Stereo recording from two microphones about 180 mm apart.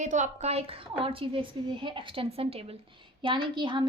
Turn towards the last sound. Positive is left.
turn(degrees=-25)  # may be behind; listen again after turning